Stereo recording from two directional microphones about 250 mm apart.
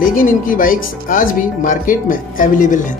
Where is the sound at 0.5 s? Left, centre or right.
Left.